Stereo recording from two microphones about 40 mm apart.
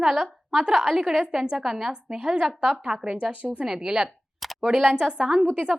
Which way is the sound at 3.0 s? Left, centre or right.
Right.